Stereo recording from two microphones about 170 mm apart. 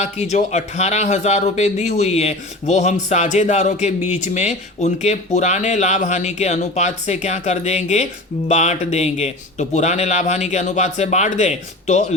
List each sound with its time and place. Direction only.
0.0 s speech: 40° left (ahead or behind)